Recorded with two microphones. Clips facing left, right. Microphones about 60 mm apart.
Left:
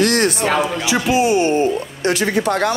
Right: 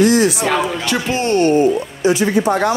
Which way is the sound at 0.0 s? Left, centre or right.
Left.